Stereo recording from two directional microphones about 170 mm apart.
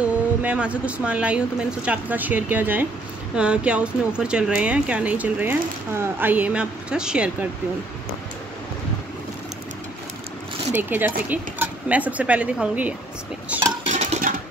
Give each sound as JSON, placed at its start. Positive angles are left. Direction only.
{"t": 0.4, "sound": "speech", "side_deg": -5}
{"t": 10.7, "sound": "speech", "side_deg": -10}
{"t": 13.5, "sound": "dishes", "side_deg": -10}
{"t": 13.8, "sound": "a sound", "side_deg": -40}